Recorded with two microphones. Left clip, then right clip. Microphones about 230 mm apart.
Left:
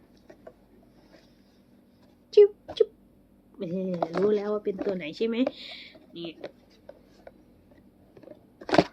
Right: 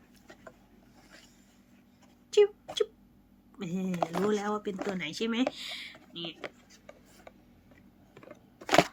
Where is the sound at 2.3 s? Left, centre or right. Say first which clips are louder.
Left 6 dB; centre.